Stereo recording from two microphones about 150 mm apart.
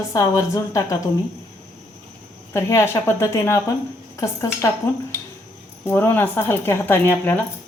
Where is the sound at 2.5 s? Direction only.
15° left (ahead or behind).